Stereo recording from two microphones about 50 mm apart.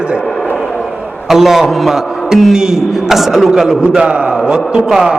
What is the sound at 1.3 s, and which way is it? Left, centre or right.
A man's voice, centre.